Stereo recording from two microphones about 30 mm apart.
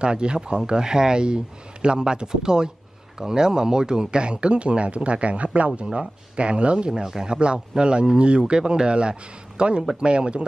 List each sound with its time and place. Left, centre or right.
0.0 s a man's voice: right
6.9 s a man's voice: right
7.3 s speech: right